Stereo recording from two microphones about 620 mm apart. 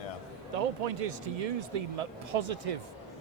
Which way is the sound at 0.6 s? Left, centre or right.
Right.